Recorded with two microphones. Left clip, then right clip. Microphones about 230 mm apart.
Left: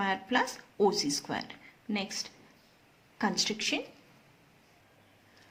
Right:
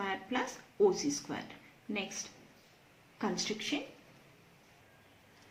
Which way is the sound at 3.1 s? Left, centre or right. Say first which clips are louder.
Left 5 dB; left.